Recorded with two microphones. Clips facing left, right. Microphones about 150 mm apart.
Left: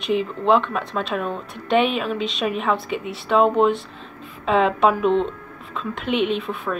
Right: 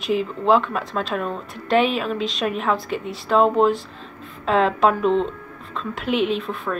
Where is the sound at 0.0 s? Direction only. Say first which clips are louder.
Even; centre (ahead or behind).